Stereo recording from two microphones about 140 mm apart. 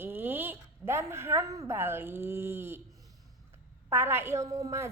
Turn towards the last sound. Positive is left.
turn(degrees=-20)  # may be behind; listen again after turning